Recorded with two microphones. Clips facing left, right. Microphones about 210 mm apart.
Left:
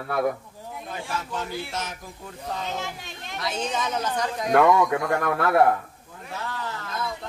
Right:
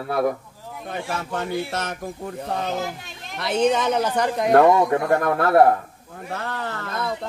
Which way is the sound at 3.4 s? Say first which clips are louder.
Right 9 dB; 60° right (ahead or behind).